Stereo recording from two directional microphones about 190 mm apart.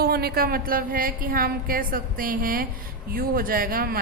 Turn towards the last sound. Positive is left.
turn(degrees=-50)  # may be behind; listen again after turning